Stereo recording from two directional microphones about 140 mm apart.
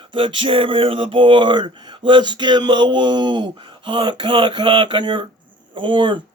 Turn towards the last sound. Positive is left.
turn(degrees=-35)  # may be behind; listen again after turning